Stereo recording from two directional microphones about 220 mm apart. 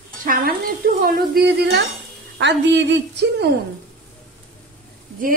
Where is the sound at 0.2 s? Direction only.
40° right (ahead or behind).